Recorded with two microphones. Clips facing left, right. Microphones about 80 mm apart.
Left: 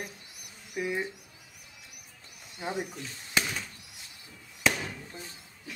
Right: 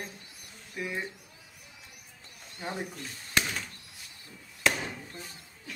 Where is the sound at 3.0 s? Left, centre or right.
Centre.